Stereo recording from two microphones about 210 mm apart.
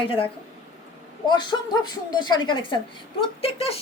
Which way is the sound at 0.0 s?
25° left (ahead or behind).